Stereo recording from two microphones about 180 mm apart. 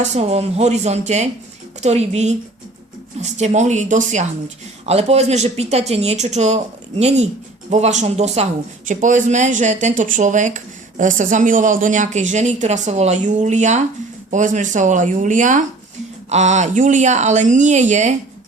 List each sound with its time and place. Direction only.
0.0 s speech: 40° right (ahead or behind)